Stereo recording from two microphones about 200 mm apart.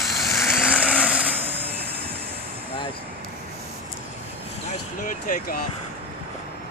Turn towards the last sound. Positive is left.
turn(degrees=45)  # may be behind; listen again after turning